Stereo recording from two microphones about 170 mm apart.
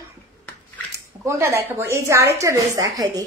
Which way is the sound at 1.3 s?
15° right (ahead or behind).